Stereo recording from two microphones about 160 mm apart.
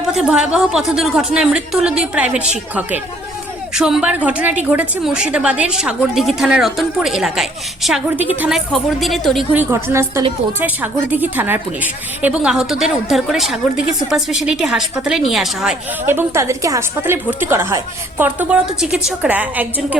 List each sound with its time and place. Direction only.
0.1 s a woman's voice: 5° right (ahead or behind)
9.6 s a woman's voice: 15° right (ahead or behind)
16.0 s a woman's voice: 15° right (ahead or behind)